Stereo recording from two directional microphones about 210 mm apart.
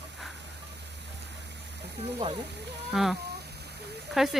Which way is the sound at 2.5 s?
55° right (ahead or behind).